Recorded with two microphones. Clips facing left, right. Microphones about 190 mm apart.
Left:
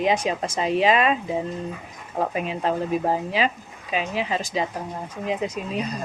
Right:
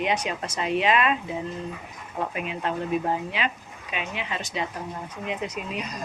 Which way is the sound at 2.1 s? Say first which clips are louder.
Left 5 dB; 35° left (ahead or behind).